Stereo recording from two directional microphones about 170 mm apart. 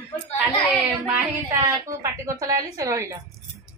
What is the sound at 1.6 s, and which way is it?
Speech, 20° right (ahead or behind).